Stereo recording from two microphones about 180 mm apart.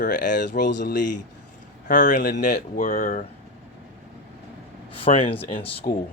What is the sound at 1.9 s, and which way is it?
Speech, 45° left (ahead or behind).